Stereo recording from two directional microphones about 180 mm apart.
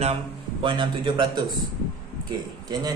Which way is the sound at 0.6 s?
25° right (ahead or behind).